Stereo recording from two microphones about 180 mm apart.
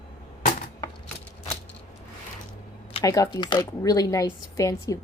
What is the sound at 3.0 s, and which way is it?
Speech, 20° left (ahead or behind).